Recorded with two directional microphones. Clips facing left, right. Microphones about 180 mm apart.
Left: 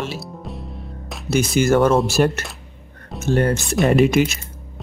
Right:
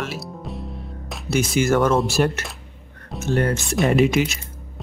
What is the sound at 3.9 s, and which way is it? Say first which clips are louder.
Speech: left 2 dB; 40° left (ahead or behind).